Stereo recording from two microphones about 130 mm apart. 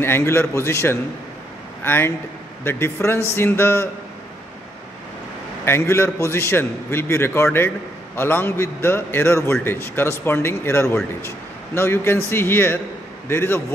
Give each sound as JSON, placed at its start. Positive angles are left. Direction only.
{"t": 0.0, "sound": "a man's voice", "side_deg": 20}
{"t": 5.7, "sound": "a man's voice", "side_deg": 20}